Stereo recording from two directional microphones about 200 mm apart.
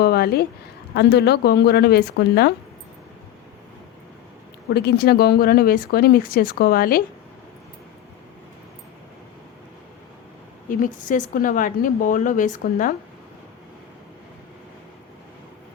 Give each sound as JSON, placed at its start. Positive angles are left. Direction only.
{"t": 0.0, "sound": "a woman's voice", "side_deg": 50}
{"t": 4.7, "sound": "speech", "side_deg": 55}
{"t": 10.7, "sound": "speech", "side_deg": 40}